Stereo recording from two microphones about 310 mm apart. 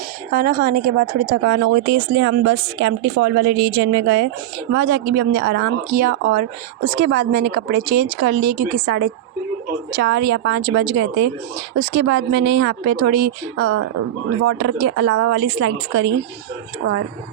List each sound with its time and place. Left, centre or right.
0.3 s speech: right
10.0 s speech: right
13.6 s speech: right